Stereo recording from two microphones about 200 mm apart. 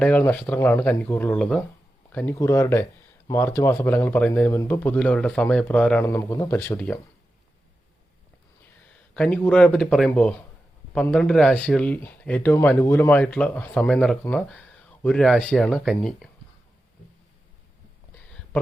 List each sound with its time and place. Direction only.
0.0 s speech: 10° left (ahead or behind)
8.6 s speech: 5° left (ahead or behind)